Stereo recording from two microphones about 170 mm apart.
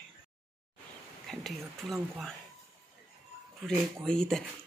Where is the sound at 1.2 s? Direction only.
Centre (ahead or behind).